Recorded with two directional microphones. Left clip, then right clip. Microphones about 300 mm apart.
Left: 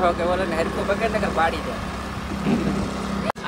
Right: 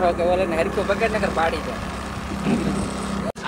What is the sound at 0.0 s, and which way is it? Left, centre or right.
Speech, right.